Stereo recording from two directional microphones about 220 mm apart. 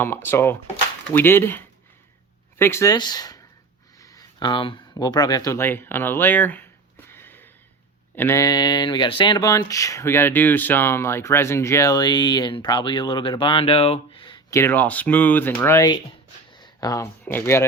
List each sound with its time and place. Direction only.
0.0 s speech: 10° left (ahead or behind)
7.1 s a sound: 10° left (ahead or behind)
8.1 s speech: 10° left (ahead or behind)